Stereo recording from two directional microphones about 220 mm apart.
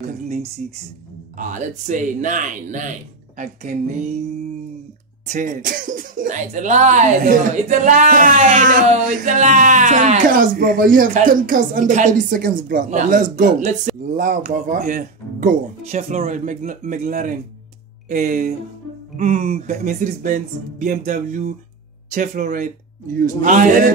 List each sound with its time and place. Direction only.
0.0 s speech: 30° right (ahead or behind)
5.3 s speech: 35° right (ahead or behind)